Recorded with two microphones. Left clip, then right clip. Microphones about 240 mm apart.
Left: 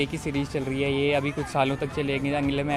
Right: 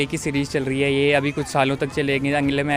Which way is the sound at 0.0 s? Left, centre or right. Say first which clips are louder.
Right 5 dB; right.